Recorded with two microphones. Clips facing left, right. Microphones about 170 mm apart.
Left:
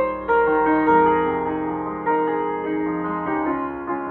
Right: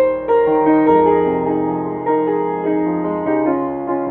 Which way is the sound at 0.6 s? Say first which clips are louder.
Right 6 dB; 30° right (ahead or behind).